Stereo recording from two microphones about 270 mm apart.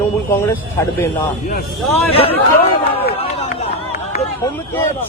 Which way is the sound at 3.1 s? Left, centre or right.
Left.